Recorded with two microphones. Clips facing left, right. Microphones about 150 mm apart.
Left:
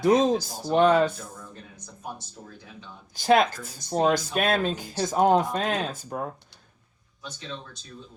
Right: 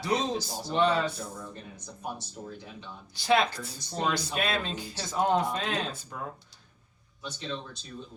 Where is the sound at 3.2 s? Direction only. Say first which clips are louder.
Left 5 dB; 45° left (ahead or behind).